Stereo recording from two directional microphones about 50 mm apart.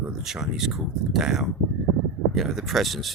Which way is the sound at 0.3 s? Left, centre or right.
Centre.